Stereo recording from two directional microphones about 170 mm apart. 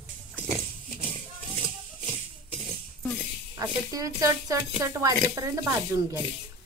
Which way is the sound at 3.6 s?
20° right (ahead or behind).